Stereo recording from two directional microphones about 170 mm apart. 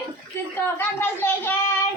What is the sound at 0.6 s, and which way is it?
Speech, 10° left (ahead or behind).